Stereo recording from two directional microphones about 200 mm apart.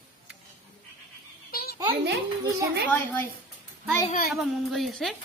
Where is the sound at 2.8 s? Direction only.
10° left (ahead or behind).